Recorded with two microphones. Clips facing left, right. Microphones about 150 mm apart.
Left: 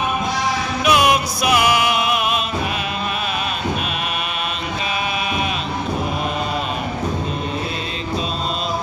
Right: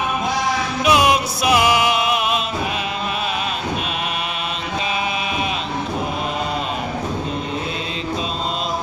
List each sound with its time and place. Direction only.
0.8 s music: 25° right (ahead or behind)